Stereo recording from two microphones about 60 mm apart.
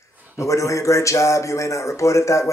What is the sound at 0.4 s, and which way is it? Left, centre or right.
Speech, left.